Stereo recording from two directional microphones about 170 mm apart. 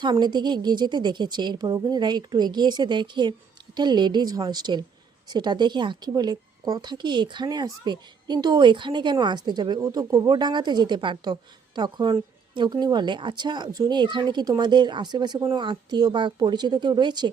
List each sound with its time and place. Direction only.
0.0 s speech: 25° right (ahead or behind)